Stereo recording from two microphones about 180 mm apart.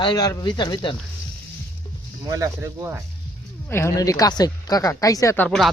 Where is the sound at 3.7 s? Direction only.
15° left (ahead or behind).